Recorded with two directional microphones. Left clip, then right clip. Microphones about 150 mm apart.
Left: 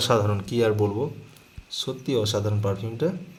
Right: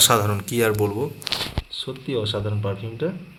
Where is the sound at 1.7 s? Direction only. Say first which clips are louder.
Left 1 dB; 25° left (ahead or behind).